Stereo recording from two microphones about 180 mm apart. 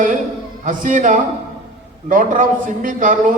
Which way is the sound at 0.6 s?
45° right (ahead or behind).